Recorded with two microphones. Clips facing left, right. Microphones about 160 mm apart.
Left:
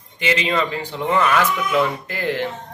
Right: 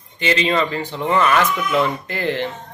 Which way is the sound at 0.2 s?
10° left (ahead or behind).